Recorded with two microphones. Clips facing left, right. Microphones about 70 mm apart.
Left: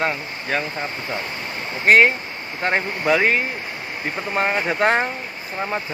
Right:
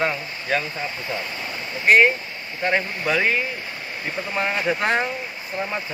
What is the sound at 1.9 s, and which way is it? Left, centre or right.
Speech, left.